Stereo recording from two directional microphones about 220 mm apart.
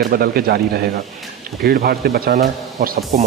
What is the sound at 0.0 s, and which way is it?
Speech, 45° right (ahead or behind).